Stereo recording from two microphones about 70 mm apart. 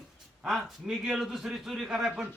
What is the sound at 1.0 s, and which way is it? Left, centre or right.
A man's voice, centre.